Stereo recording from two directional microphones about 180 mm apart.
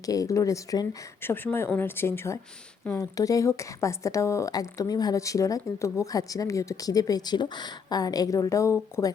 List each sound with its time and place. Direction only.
0.0 s a woman's voice: 20° left (ahead or behind)